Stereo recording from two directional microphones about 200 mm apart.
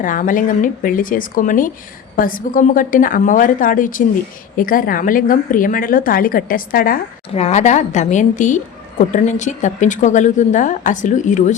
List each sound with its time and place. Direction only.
0.0 s a woman's voice: 40° left (ahead or behind)
7.3 s a woman's voice: 35° left (ahead or behind)